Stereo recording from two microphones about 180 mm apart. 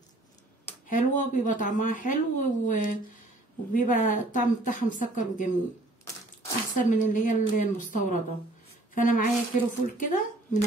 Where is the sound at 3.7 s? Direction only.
45° left (ahead or behind).